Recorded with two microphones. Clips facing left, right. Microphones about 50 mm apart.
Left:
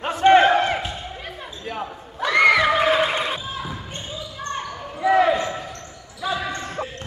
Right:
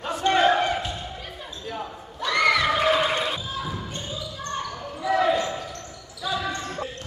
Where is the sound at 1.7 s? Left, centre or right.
Left.